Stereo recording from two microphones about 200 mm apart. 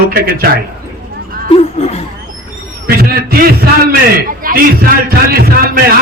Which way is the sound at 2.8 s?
50° right (ahead or behind).